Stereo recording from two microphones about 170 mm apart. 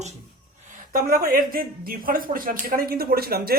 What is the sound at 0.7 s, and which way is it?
Speech, 55° right (ahead or behind).